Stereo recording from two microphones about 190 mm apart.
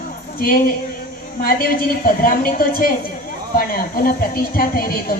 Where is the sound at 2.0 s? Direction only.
50° left (ahead or behind).